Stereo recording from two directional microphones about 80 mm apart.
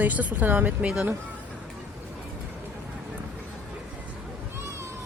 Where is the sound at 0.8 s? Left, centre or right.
Centre.